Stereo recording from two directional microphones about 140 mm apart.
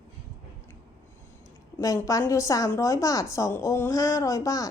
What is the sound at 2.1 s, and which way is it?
A woman's voice, 25° left (ahead or behind).